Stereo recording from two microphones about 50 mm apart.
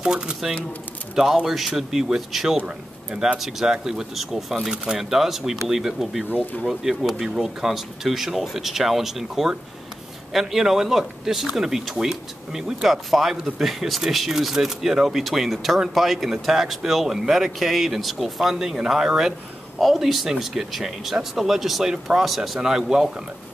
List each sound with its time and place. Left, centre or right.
0.0 s speech: centre
4.6 s speech: centre
6.3 s speech: left
6.7 s speech: centre